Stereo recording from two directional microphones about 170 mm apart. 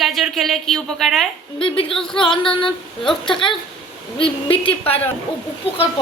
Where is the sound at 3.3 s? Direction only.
30° left (ahead or behind).